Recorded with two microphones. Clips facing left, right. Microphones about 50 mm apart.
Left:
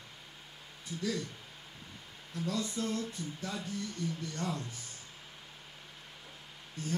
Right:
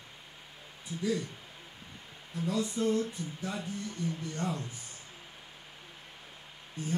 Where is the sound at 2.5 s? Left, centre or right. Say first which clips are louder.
Right 5 dB; right.